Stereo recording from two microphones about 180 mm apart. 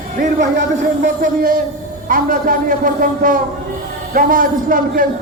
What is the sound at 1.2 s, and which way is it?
A man's voice, 50° right (ahead or behind).